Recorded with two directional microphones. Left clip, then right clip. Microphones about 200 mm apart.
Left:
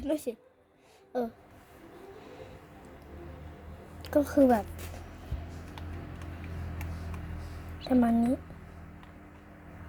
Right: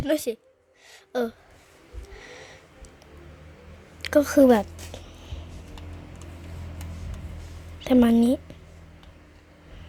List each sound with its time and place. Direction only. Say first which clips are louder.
0.0 s a woman's voice: right 7 dB; 25° right (ahead or behind)
4.0 s a woman's voice: right 7 dB; 30° right (ahead or behind)
7.9 s a woman's voice: right 7 dB; 40° right (ahead or behind)